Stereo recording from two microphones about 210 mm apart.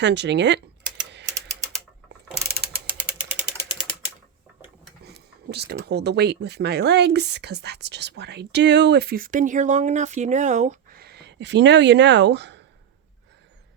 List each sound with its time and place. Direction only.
0.0 s speech: 55° right (ahead or behind)
5.0 s speech: 50° right (ahead or behind)